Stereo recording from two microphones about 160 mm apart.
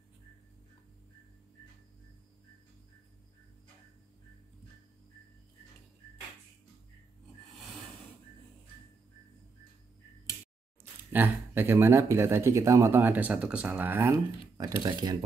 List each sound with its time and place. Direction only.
11.1 s speech: 15° right (ahead or behind)
14.8 s speech: 25° right (ahead or behind)